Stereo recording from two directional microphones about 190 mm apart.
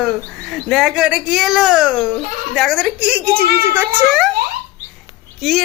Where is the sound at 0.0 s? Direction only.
Centre (ahead or behind).